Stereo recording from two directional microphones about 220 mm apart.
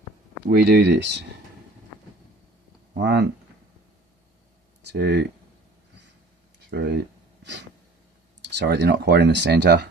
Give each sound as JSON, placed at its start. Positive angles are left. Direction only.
{"t": 0.5, "sound": "speech", "side_deg": -45}
{"t": 2.9, "sound": "speech", "side_deg": -50}
{"t": 4.8, "sound": "speech", "side_deg": -50}
{"t": 6.7, "sound": "speech", "side_deg": -50}
{"t": 8.5, "sound": "speech", "side_deg": -50}